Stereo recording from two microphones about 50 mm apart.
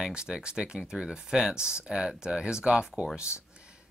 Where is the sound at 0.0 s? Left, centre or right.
Centre.